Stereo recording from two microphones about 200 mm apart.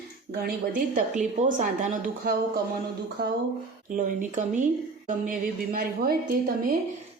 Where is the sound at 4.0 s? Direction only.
40° right (ahead or behind).